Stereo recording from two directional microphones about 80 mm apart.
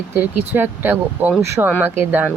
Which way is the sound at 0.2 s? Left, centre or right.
Right.